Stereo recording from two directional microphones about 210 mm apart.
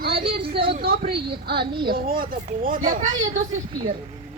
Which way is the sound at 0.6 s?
45° right (ahead or behind).